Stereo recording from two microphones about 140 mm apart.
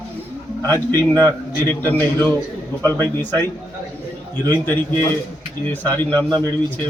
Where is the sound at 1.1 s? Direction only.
15° left (ahead or behind).